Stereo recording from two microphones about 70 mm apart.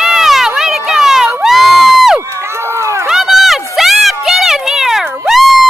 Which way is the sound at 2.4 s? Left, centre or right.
Right.